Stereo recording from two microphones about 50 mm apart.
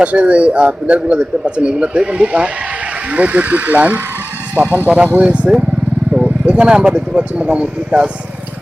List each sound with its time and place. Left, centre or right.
0.0 s speech: right